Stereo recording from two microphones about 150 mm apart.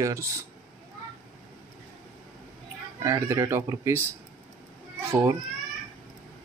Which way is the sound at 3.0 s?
25° right (ahead or behind).